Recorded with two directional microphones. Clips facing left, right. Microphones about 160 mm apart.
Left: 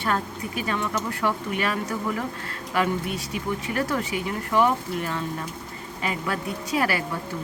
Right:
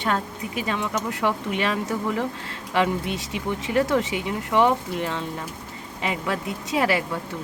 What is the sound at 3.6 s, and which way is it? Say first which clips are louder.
Speech: right 8 dB; 25° right (ahead or behind).